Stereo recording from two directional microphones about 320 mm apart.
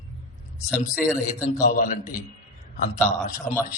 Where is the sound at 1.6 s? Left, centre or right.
Left.